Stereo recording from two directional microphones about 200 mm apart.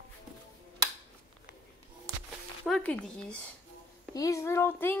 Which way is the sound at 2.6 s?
5° left (ahead or behind).